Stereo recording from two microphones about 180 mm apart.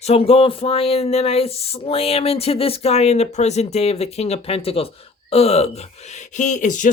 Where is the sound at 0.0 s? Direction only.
35° left (ahead or behind).